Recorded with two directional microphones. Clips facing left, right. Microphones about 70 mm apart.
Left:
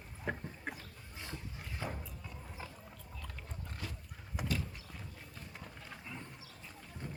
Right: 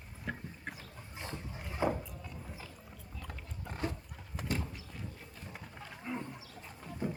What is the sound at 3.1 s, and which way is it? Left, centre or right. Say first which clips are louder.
Pig: right 2 dB; centre.